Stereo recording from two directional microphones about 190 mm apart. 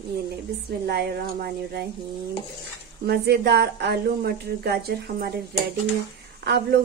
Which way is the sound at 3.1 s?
55° right (ahead or behind).